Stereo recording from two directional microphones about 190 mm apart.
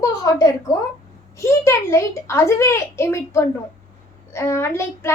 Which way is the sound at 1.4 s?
15° left (ahead or behind).